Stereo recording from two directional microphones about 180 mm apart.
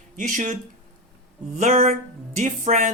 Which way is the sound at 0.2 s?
45° right (ahead or behind).